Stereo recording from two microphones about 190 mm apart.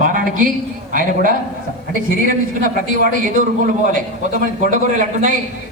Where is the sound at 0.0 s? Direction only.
45° right (ahead or behind).